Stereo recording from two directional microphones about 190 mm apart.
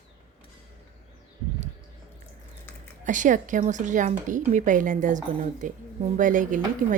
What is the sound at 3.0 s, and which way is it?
Speech, 40° right (ahead or behind).